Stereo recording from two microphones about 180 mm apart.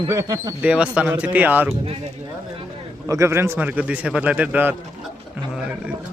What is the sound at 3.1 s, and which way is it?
A man's voice, 15° right (ahead or behind).